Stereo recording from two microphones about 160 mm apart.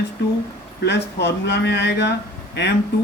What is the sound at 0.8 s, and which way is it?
Speech, 90° left.